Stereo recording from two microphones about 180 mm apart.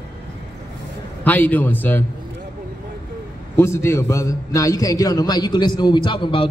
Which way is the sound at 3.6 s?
15° left (ahead or behind).